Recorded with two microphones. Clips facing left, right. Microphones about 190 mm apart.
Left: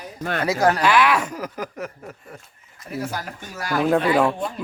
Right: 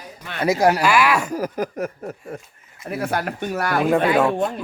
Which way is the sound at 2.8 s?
60° right (ahead or behind).